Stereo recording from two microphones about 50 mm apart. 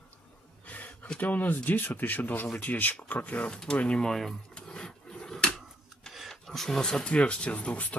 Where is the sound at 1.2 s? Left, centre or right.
Left.